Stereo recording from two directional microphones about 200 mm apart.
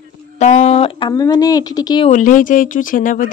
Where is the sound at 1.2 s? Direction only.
20° left (ahead or behind).